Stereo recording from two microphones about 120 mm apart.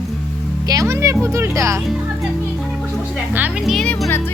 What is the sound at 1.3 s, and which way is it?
Speech, 25° right (ahead or behind).